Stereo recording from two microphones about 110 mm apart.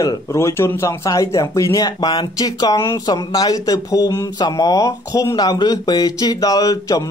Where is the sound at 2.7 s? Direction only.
25° left (ahead or behind).